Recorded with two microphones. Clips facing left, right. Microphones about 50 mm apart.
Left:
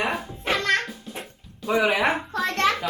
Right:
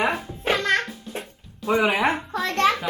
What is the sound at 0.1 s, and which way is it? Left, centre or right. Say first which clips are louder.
Music: right 1 dB; centre.